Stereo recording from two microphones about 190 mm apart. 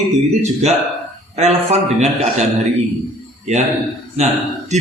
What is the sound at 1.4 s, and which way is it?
Speech, 35° right (ahead or behind).